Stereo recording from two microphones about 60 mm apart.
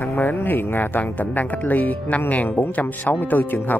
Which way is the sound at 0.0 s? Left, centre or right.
Left.